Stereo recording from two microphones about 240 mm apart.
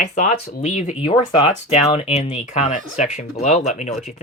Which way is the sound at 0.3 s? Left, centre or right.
Left.